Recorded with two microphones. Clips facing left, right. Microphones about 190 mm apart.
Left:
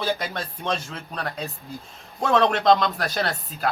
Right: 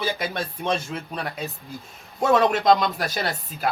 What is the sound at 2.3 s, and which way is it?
Speech, 5° right (ahead or behind).